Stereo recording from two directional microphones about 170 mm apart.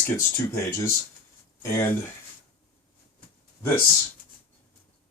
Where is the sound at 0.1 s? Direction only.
15° left (ahead or behind).